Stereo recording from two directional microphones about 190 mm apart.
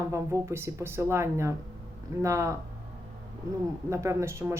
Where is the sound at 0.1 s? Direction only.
15° right (ahead or behind).